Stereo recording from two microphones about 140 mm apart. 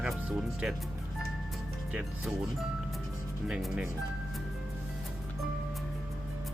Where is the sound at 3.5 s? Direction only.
5° right (ahead or behind).